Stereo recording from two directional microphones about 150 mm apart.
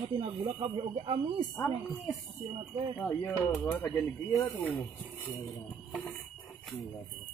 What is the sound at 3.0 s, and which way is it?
Speech, centre (ahead or behind).